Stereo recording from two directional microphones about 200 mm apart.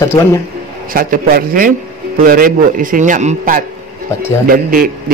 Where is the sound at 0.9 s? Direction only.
45° right (ahead or behind).